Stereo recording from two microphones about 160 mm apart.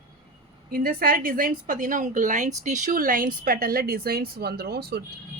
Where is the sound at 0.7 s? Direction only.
65° right (ahead or behind).